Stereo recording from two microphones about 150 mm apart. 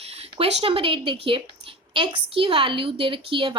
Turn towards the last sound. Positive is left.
turn(degrees=-35)  # may be behind; listen again after turning